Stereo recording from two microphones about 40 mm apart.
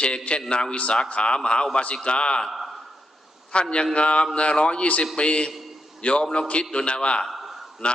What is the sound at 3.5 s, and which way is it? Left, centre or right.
A man's voice, left.